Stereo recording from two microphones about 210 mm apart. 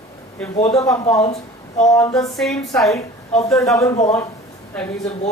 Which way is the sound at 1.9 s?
15° left (ahead or behind).